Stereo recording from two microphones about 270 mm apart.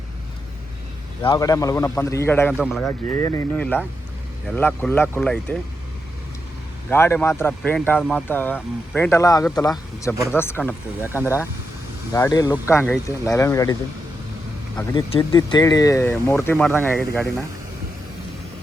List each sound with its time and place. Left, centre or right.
1.2 s speech: centre
3.2 s speech: centre
6.9 s speech: centre
12.1 s speech: centre
14.8 s speech: centre